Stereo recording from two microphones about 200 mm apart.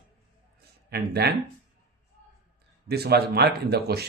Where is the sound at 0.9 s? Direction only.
55° right (ahead or behind).